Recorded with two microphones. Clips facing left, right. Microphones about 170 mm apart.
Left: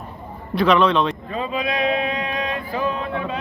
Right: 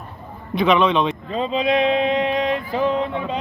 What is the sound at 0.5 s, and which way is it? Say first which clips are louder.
Speech: even; centre (ahead or behind).